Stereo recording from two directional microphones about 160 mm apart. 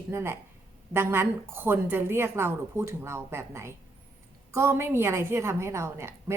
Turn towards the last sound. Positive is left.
turn(degrees=-15)  # may be behind; listen again after turning